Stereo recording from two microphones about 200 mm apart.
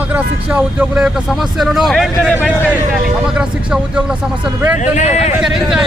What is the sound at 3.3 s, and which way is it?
Speech, 5° right (ahead or behind).